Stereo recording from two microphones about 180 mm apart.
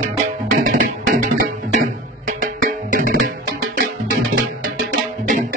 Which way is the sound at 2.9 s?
50° right (ahead or behind).